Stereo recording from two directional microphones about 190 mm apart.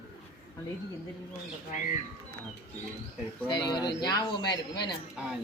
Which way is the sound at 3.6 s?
25° left (ahead or behind).